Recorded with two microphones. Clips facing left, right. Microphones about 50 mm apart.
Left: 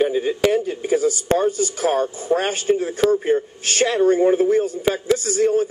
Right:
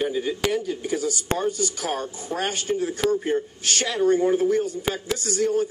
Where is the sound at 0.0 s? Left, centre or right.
Left.